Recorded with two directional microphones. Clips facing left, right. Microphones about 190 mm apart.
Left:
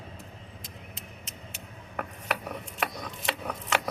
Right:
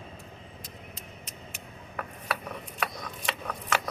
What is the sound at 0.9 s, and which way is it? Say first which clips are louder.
Vehicle: even; 30° left (ahead or behind).